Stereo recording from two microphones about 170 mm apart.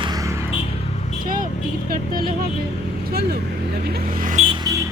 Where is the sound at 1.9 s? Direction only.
60° right (ahead or behind).